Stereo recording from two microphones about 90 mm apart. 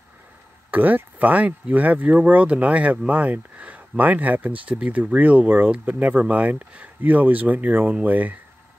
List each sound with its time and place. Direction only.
0.7 s speech: 20° right (ahead or behind)